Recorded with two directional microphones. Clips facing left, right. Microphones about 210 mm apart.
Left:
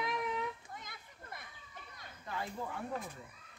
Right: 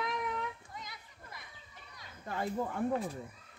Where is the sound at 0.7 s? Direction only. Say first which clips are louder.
Right 2 dB; 55° left (ahead or behind).